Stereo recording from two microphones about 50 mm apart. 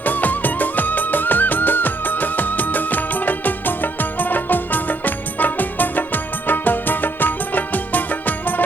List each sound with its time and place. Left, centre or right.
0.0 s music: left